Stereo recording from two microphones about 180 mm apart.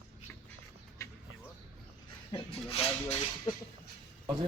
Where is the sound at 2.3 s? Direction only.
35° left (ahead or behind).